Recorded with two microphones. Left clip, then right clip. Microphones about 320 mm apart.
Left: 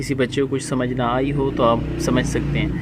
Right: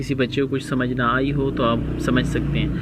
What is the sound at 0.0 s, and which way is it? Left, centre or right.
Speech, left.